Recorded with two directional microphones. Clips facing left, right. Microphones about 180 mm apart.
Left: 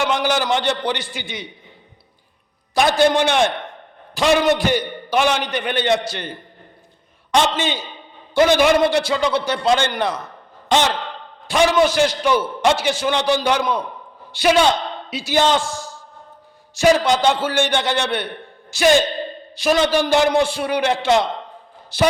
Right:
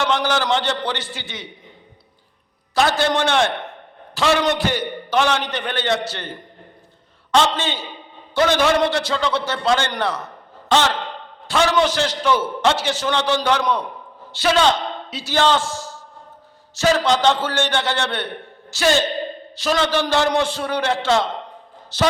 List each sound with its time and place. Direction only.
0.0 s a man's voice: 10° left (ahead or behind)
2.7 s a man's voice: 15° left (ahead or behind)
7.3 s a man's voice: 15° left (ahead or behind)